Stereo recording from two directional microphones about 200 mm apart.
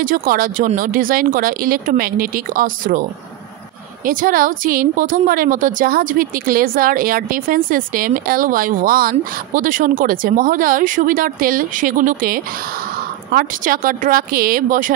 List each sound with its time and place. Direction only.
0.0 s a woman's voice: 45° right (ahead or behind)
4.0 s a woman's voice: 45° right (ahead or behind)